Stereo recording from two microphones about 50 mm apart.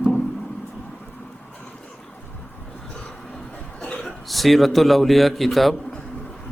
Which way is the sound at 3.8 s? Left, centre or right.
Left.